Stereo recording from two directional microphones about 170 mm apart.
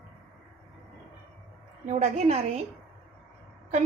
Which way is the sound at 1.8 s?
40° right (ahead or behind).